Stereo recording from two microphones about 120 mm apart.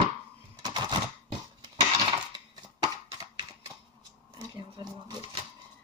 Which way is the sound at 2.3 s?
35° right (ahead or behind).